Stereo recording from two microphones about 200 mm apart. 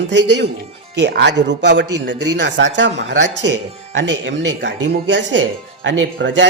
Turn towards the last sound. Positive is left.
turn(degrees=-65)  # may be behind; listen again after turning